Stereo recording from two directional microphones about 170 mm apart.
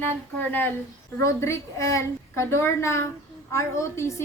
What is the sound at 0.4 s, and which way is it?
A woman's voice, 10° left (ahead or behind).